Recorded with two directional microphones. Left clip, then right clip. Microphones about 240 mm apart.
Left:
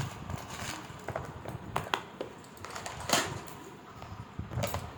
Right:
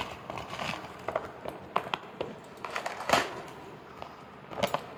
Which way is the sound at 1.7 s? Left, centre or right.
Centre.